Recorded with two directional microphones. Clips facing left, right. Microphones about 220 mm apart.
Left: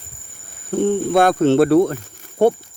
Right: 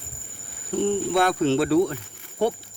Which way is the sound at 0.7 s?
45° left (ahead or behind).